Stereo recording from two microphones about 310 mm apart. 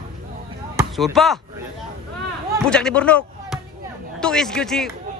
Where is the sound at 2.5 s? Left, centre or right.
Centre.